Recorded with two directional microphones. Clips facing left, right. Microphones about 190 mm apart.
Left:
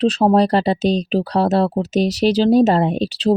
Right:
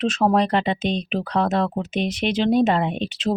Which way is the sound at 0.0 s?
35° left (ahead or behind).